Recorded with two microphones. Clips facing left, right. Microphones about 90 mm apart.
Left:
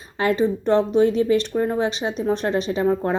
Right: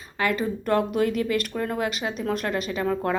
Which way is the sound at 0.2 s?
30° left (ahead or behind).